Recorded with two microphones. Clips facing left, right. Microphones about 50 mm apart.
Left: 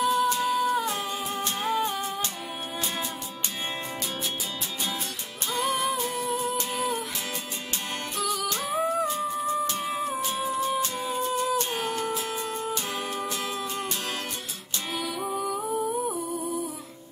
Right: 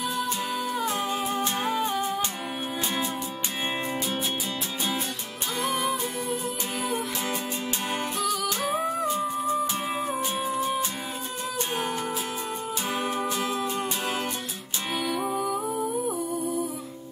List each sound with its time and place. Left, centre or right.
0.0 s music: centre
1.6 s humming: centre
5.7 s music: centre
8.2 s music: centre
11.7 s music: centre
15.0 s music: centre